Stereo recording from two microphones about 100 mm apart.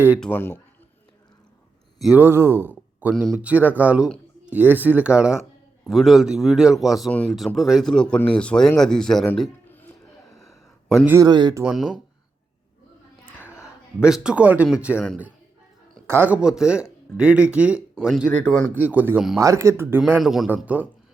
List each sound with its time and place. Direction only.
0.3 s speech: 20° left (ahead or behind)
2.1 s speech: 25° right (ahead or behind)
5.8 s speech: centre (ahead or behind)
11.2 s speech: 45° right (ahead or behind)
11.6 s speech: 5° right (ahead or behind)
13.2 s whispering: 25° left (ahead or behind)
13.6 s a man's voice: 10° right (ahead or behind)
16.0 s speech: 20° right (ahead or behind)
18.3 s speech: 15° left (ahead or behind)
18.7 s speech: 15° right (ahead or behind)
19.4 s speech: 30° right (ahead or behind)
20.2 s speech: 5° right (ahead or behind)
20.7 s speech: 15° right (ahead or behind)